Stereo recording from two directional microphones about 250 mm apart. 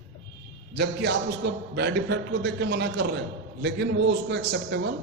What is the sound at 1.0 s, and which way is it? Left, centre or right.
A man's voice, right.